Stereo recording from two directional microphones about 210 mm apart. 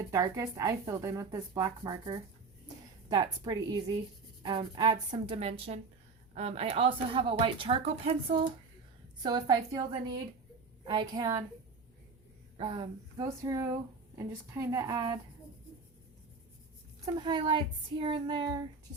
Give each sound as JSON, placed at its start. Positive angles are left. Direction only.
{"t": 0.1, "sound": "a woman's voice", "side_deg": -15}
{"t": 11.1, "sound": "a woman's voice", "side_deg": -15}
{"t": 12.5, "sound": "a woman's voice", "side_deg": -25}
{"t": 17.2, "sound": "a woman's voice", "side_deg": -20}